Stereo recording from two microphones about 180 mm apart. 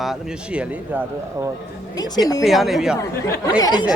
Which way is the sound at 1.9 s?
20° left (ahead or behind).